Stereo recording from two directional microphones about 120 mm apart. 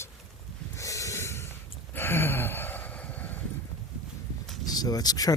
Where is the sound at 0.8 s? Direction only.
25° left (ahead or behind).